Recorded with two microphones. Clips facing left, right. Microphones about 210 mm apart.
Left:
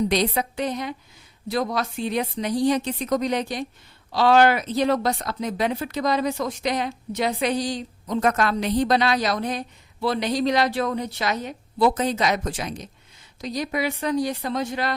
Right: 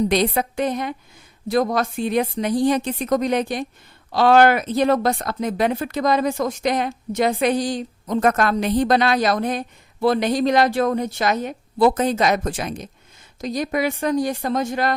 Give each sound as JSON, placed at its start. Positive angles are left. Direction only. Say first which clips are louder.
{"t": 0.1, "sound": "speech", "louder": "right 3 dB", "side_deg": -50}